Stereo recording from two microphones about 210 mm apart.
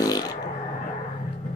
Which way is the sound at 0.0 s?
20° left (ahead or behind).